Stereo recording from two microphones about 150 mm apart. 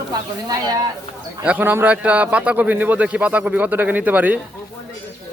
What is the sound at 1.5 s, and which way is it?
A man's voice, 10° right (ahead or behind).